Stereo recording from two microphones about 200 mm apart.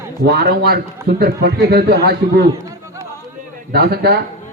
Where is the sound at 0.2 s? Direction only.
55° right (ahead or behind).